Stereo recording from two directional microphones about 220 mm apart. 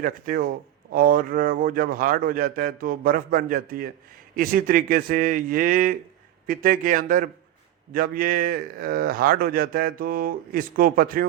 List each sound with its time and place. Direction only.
0.0 s speech: 40° right (ahead or behind)